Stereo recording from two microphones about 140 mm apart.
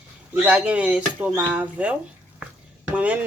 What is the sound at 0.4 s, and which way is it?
Speech, 10° right (ahead or behind).